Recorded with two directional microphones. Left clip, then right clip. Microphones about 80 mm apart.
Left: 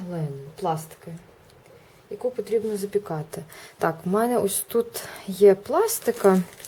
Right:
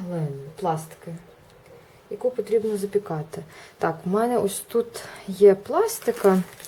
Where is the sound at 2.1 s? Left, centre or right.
Centre.